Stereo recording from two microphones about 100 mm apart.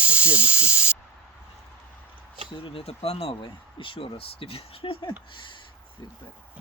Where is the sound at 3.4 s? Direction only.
60° left (ahead or behind).